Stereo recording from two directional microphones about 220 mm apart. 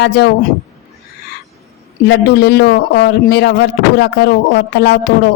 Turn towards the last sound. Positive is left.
turn(degrees=50)  # may be behind; listen again after turning